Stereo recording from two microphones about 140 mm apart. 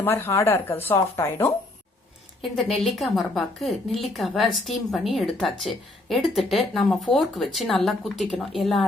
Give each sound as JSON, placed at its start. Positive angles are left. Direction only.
{"t": 0.0, "sound": "speech", "side_deg": 15}
{"t": 2.4, "sound": "a woman's voice", "side_deg": 0}